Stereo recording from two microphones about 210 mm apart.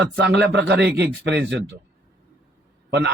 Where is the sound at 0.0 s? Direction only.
55° right (ahead or behind).